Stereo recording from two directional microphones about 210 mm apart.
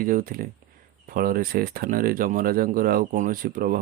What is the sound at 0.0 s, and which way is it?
Speech, 40° right (ahead or behind).